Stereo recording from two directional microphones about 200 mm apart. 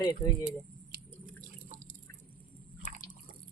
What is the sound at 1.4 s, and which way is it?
Drip, 40° right (ahead or behind).